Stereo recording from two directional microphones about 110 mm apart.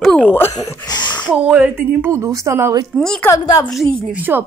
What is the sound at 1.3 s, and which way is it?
Speech, 15° right (ahead or behind).